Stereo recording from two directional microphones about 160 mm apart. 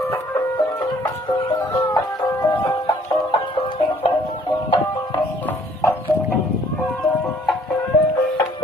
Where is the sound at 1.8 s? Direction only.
20° left (ahead or behind).